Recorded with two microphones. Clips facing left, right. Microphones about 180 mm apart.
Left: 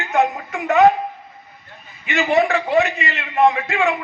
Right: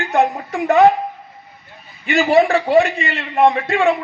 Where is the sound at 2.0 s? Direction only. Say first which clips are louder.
Right 4 dB; 35° right (ahead or behind).